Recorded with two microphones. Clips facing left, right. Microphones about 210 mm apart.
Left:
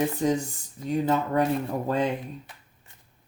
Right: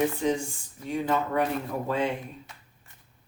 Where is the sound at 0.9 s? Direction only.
40° left (ahead or behind).